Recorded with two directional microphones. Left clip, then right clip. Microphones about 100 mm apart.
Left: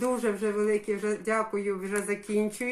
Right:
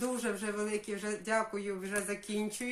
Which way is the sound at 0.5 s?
15° right (ahead or behind).